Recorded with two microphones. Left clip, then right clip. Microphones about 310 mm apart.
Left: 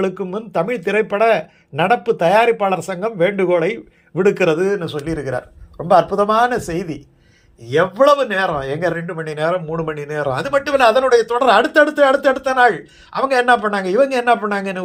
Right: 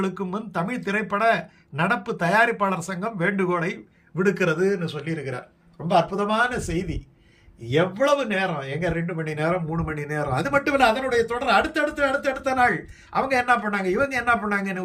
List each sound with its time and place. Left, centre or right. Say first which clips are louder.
0.0 s speech: left 7 dB; centre